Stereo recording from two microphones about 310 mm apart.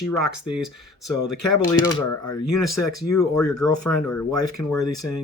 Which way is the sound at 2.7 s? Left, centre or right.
Left.